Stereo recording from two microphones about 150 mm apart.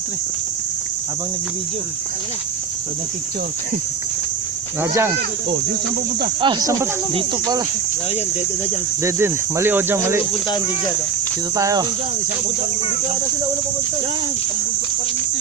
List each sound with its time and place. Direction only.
4.8 s speech: 15° right (ahead or behind)
6.4 s speech: 30° right (ahead or behind)
9.0 s speech: 15° right (ahead or behind)
11.5 s speech: 25° right (ahead or behind)